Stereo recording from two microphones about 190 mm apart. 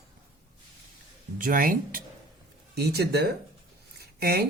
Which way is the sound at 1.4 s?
45° right (ahead or behind).